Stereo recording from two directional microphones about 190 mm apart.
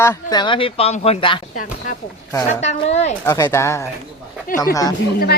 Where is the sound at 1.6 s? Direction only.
45° left (ahead or behind).